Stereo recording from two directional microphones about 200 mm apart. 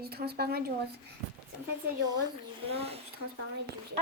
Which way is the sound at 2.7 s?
30° right (ahead or behind).